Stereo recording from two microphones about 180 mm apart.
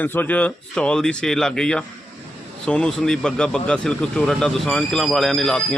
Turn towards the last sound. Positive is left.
turn(degrees=0)  # may be behind; listen again after turning